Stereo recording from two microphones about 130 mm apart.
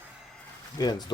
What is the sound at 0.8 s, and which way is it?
Speech, 35° left (ahead or behind).